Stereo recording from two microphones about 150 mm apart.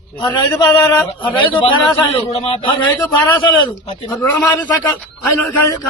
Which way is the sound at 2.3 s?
40° left (ahead or behind).